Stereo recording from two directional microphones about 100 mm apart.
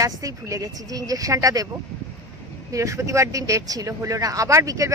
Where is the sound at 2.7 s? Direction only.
30° right (ahead or behind).